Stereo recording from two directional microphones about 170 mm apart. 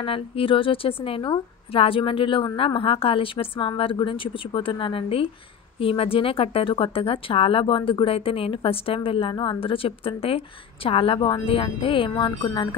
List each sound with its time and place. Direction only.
0.0 s a woman's voice: 30° left (ahead or behind)